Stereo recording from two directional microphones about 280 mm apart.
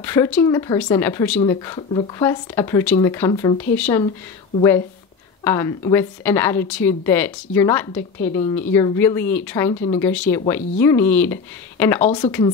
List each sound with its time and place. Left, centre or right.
0.0 s a woman's voice: centre